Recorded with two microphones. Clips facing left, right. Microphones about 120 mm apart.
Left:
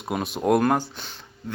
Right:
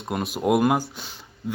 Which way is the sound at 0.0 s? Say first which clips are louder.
Even; centre (ahead or behind).